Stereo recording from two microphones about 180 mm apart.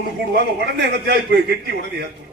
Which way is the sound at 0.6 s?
70° right (ahead or behind).